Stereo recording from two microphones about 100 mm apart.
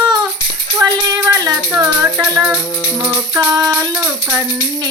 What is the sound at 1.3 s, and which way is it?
Music, 35° right (ahead or behind).